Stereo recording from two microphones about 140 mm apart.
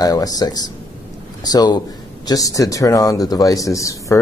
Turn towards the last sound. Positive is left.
turn(degrees=20)  # may be behind; listen again after turning